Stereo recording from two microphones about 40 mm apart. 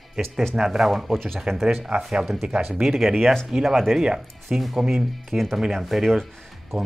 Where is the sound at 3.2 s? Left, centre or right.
Centre.